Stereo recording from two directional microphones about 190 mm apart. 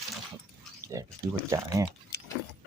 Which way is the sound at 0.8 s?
15° right (ahead or behind).